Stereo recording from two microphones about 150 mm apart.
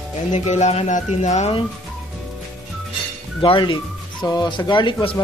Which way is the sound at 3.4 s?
35° left (ahead or behind).